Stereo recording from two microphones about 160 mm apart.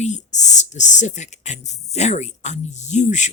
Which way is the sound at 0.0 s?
45° left (ahead or behind).